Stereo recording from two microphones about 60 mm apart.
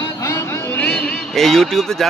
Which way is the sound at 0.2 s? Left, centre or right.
Left.